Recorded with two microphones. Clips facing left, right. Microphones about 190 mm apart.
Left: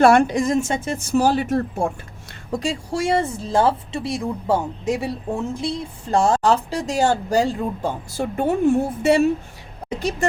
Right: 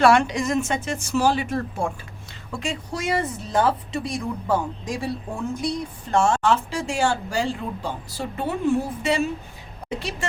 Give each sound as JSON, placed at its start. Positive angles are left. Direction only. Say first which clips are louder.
{"t": 0.0, "sound": "a woman's voice", "louder": "left 3 dB", "side_deg": 50}
{"t": 2.5, "sound": "speech", "louder": "left 5 dB", "side_deg": 35}
{"t": 10.0, "sound": "a woman's voice", "louder": "left 7 dB", "side_deg": 45}